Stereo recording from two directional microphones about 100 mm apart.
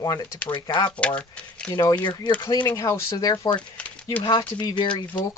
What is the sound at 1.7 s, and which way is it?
Speech, 35° left (ahead or behind).